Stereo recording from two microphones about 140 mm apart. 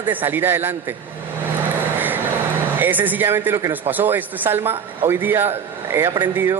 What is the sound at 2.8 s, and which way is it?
Speech, 15° right (ahead or behind).